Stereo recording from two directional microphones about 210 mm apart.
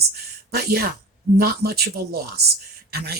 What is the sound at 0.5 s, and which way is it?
Speech, 50° right (ahead or behind).